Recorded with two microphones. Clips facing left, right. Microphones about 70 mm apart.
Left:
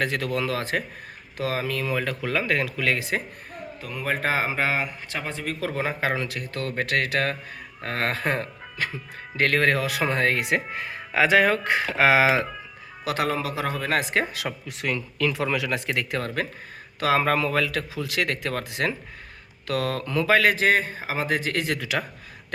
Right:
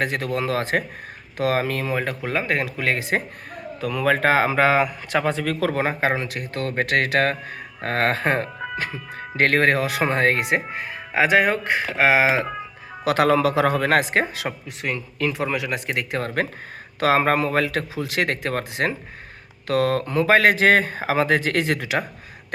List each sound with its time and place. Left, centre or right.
0.0 s a man's voice: right
3.8 s speech: right
4.3 s speech: right
5.8 s a man's voice: right
10.8 s speech: centre
12.2 s speech: right
13.1 s speech: right
13.3 s speech: right
14.1 s a man's voice: right
14.4 s speech: centre
16.2 s a man's voice: right
21.6 s a man's voice: right